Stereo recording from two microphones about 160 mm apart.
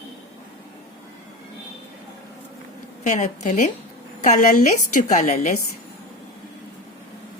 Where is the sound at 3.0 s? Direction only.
50° left (ahead or behind).